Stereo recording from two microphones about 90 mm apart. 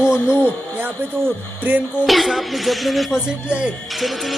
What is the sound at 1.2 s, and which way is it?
Speech, 20° right (ahead or behind).